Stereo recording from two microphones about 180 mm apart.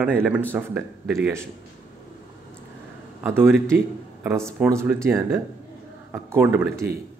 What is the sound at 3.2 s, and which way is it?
A man's voice, 10° right (ahead or behind).